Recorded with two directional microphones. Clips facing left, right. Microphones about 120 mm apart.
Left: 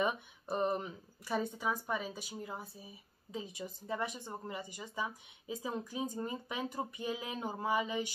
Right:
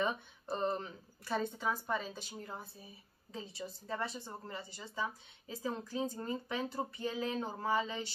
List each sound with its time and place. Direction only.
0.0 s speech: 15° left (ahead or behind)